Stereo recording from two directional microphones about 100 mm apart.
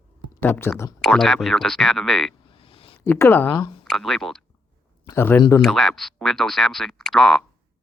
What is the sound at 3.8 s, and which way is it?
Speech, centre (ahead or behind).